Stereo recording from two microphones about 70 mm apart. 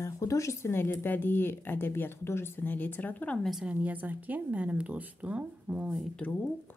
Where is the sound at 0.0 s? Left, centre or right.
Left.